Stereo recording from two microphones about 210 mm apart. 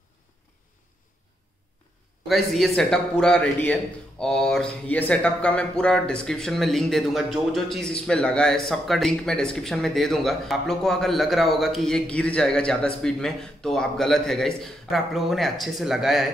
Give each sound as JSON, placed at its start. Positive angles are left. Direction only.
{"t": 2.2, "sound": "a man's voice", "side_deg": 0}